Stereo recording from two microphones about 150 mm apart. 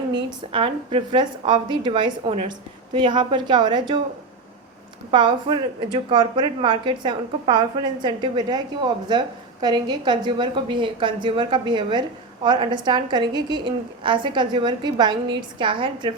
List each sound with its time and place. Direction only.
0.5 s a woman's voice: 35° right (ahead or behind)
5.1 s a woman's voice: 30° right (ahead or behind)